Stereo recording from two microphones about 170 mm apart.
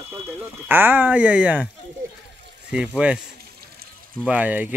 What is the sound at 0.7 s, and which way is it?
Speech, 10° right (ahead or behind).